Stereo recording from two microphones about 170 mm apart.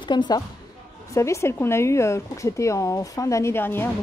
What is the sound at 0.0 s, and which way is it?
Speech, 25° left (ahead or behind).